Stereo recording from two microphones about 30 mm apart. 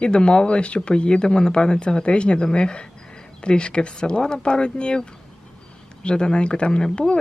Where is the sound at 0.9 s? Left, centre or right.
Left.